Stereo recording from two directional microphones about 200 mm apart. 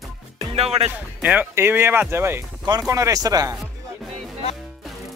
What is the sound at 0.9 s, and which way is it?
Speech, 10° right (ahead or behind).